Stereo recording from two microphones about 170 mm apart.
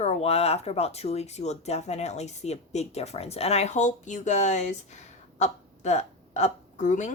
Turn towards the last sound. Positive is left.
turn(degrees=45)  # may be behind; listen again after turning